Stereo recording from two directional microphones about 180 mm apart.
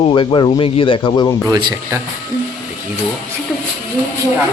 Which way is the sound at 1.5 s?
20° right (ahead or behind).